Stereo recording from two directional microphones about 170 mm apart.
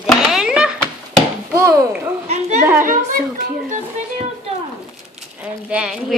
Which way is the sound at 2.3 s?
45° right (ahead or behind).